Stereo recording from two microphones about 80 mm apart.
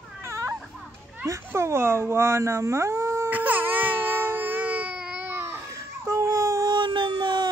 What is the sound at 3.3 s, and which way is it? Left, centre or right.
Baby cry, right.